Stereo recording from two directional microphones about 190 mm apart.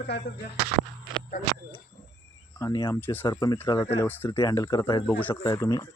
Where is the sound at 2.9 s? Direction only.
10° left (ahead or behind).